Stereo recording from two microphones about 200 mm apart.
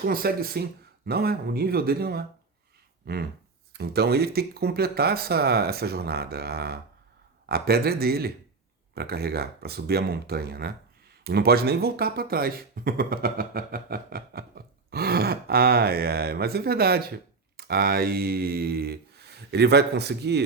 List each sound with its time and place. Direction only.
0.0 s speech: 50° right (ahead or behind)
3.7 s speech: 55° right (ahead or behind)